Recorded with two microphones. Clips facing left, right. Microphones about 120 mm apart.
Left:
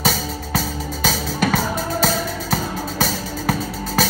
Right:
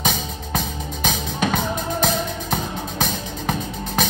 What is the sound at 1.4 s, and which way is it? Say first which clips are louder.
Music: left 2 dB; 20° right (ahead or behind).